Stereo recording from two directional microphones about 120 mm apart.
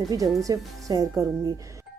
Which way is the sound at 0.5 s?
30° right (ahead or behind).